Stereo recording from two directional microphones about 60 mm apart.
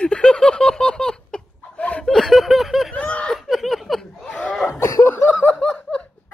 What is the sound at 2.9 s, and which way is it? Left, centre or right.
Speech, left.